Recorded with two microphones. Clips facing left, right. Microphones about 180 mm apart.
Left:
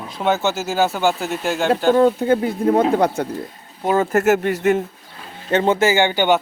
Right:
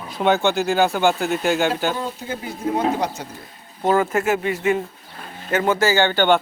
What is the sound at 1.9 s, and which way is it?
Speech, 60° left (ahead or behind).